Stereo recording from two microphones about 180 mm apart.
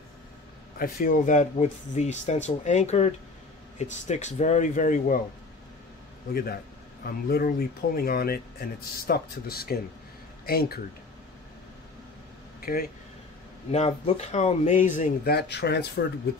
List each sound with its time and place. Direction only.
0.7 s speech: 50° left (ahead or behind)
6.3 s speech: 55° left (ahead or behind)
12.5 s air conditioning: 55° left (ahead or behind)
13.7 s speech: 35° left (ahead or behind); by 16.1 s 65° left (ahead or behind)